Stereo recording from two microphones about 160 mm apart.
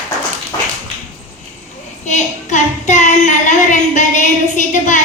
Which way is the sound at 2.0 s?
50° left (ahead or behind).